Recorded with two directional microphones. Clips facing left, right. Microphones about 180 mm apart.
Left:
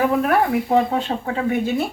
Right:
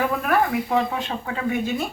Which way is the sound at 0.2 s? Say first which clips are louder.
Left 3 dB; 30° left (ahead or behind).